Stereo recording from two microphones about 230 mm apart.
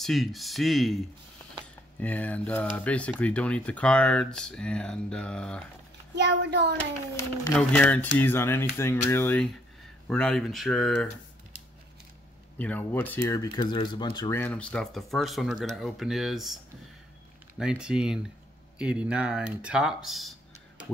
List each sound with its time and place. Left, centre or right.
0.0 s speech: centre
2.0 s speech: centre
6.1 s a child's voice: right
7.5 s speech: centre
12.5 s speech: centre
17.6 s speech: centre